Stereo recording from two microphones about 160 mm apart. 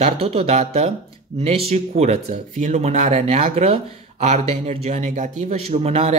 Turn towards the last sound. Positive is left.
turn(degrees=-40)  # may be behind; listen again after turning